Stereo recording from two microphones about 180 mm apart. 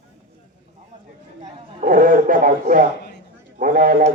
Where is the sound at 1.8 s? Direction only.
50° right (ahead or behind).